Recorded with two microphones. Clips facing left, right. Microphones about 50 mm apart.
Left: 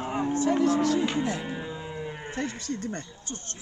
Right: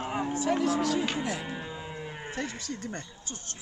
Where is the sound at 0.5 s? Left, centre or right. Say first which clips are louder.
Left 4 dB; centre.